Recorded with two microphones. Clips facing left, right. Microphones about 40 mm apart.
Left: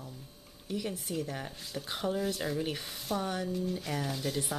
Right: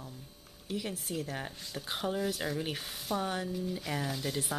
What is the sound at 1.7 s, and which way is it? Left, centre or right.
Speech, centre.